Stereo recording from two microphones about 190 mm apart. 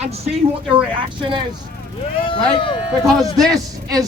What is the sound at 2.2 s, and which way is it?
Speech, 25° left (ahead or behind).